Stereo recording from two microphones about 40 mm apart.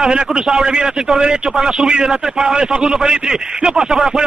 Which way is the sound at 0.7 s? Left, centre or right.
Centre.